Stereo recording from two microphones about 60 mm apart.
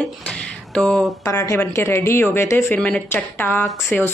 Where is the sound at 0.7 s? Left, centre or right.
Centre.